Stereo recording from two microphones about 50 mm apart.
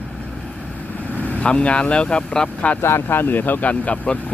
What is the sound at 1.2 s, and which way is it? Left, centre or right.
Vehicle, left.